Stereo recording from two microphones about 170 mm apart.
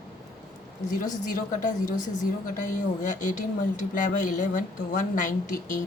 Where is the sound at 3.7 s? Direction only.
50° left (ahead or behind).